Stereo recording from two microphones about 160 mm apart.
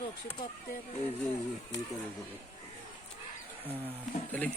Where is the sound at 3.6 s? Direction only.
10° right (ahead or behind).